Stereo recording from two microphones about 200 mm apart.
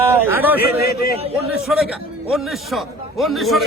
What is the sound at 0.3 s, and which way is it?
A man's voice, 10° right (ahead or behind).